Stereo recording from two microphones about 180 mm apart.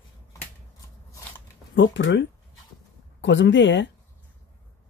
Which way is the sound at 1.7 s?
90° left.